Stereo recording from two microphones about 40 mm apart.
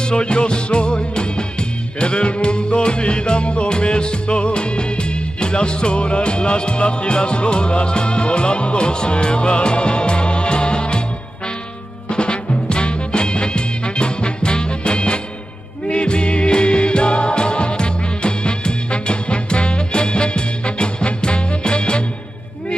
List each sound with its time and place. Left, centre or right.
0.0 s music: left
12.1 s music: left